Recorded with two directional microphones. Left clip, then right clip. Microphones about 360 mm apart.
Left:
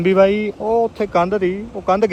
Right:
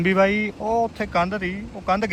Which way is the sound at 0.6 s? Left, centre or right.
Right.